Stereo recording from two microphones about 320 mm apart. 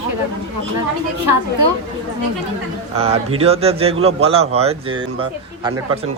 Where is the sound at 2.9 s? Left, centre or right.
Centre.